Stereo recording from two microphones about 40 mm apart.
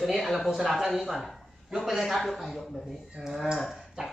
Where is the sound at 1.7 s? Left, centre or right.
Centre.